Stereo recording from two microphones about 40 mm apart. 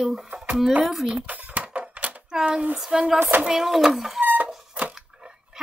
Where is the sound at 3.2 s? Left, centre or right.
Right.